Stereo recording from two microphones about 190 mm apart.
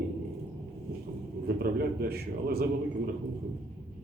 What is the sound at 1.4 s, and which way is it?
A man's voice, 50° right (ahead or behind).